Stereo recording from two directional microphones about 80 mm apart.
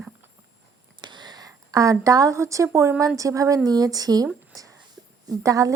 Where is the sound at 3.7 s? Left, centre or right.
Right.